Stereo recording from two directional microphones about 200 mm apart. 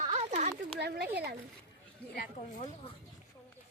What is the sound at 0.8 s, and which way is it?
Speech, 55° right (ahead or behind).